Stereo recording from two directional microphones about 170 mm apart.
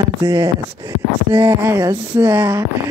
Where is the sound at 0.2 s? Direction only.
15° right (ahead or behind).